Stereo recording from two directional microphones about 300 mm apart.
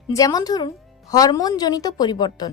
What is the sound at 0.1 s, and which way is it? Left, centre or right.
A woman's voice, centre.